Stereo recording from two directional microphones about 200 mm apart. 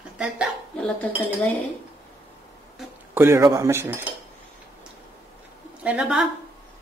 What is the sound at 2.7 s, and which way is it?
Speech, 10° right (ahead or behind).